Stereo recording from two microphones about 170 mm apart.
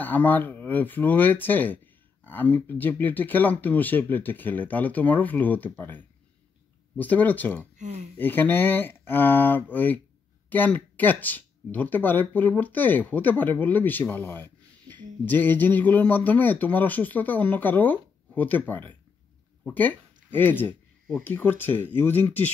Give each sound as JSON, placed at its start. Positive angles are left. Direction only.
{"t": 0.0, "sound": "speech", "side_deg": 10}
{"t": 7.7, "sound": "speech", "side_deg": -45}
{"t": 8.2, "sound": "speech", "side_deg": 10}